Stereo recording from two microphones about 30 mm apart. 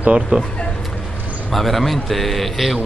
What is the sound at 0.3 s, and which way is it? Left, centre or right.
Speech, right.